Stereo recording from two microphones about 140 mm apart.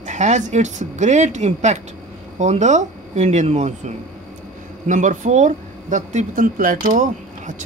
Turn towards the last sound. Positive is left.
turn(degrees=-65)  # may be behind; listen again after turning